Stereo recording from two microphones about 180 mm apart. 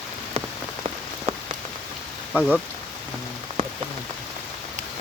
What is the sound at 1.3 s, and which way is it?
Rain on surface, 35° right (ahead or behind).